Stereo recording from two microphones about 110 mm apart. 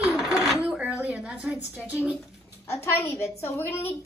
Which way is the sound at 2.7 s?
20° left (ahead or behind).